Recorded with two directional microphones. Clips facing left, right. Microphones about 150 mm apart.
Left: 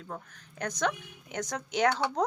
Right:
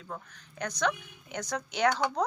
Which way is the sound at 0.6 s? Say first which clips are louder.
Even; 50° left (ahead or behind).